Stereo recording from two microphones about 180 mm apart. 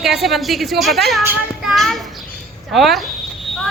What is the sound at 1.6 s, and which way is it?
Children playing, centre (ahead or behind).